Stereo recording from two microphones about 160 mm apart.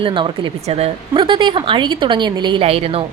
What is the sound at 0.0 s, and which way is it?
A woman's voice, 30° right (ahead or behind).